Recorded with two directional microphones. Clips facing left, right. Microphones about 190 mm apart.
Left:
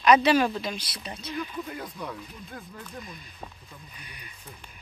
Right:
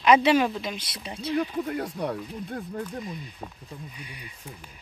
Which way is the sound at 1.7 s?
70° right (ahead or behind).